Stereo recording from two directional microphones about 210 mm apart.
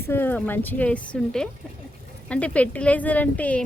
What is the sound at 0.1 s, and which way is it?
A woman's voice, 10° left (ahead or behind).